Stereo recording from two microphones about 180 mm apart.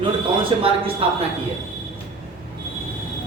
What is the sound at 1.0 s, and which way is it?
Speech, 35° right (ahead or behind).